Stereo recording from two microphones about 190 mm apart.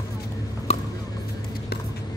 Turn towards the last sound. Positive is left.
turn(degrees=35)  # may be behind; listen again after turning